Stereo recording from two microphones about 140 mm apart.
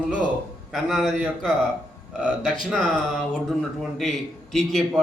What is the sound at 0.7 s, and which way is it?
A man's voice, centre (ahead or behind).